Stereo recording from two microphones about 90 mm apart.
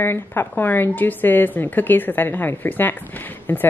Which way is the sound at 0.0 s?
25° left (ahead or behind).